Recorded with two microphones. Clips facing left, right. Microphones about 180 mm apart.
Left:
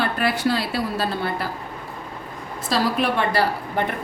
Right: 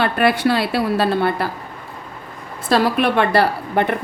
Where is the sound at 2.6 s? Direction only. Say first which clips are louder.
Right 5 dB; 60° right (ahead or behind).